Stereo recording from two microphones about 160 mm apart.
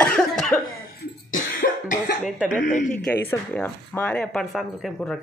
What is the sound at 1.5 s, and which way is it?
Cough, 75° left (ahead or behind).